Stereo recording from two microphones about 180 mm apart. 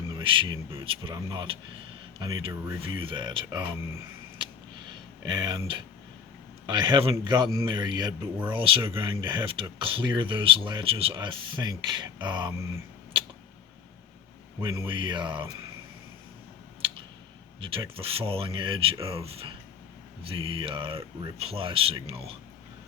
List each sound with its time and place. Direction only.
0.1 s speech: 30° right (ahead or behind)
5.2 s speech: 25° right (ahead or behind)
14.6 s speech: 25° right (ahead or behind)
17.6 s speech: 30° right (ahead or behind)